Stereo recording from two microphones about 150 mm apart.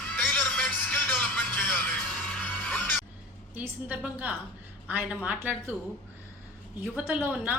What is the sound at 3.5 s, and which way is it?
A woman's voice, 10° right (ahead or behind).